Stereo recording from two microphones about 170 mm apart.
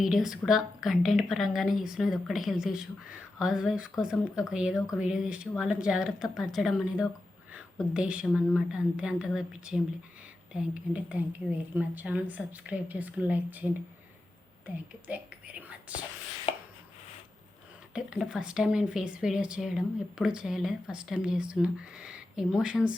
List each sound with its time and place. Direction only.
0.0 s a woman's voice: 5° right (ahead or behind)
15.0 s speech: 10° right (ahead or behind)
16.5 s chopping: 35° left (ahead or behind)
17.9 s speech: 5° right (ahead or behind)